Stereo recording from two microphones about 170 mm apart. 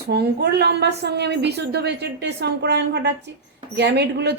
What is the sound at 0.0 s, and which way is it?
A woman's voice, 75° right (ahead or behind).